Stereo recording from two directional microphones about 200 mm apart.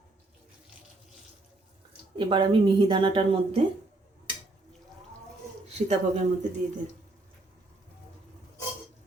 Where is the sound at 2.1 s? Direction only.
25° right (ahead or behind).